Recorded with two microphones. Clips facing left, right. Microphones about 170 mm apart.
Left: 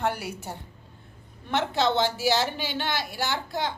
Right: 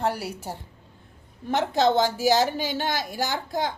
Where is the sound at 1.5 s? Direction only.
40° right (ahead or behind).